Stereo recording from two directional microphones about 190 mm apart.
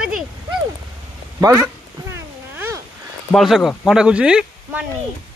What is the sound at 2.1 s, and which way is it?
Cat, 15° right (ahead or behind).